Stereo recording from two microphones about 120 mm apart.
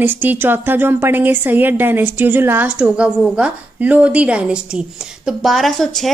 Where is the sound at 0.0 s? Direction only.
15° right (ahead or behind).